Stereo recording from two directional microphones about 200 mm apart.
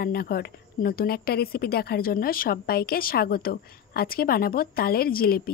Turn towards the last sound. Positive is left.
turn(degrees=50)  # may be behind; listen again after turning